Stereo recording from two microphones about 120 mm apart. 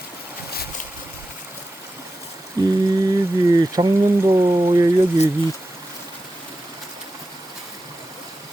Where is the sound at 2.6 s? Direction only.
30° right (ahead or behind).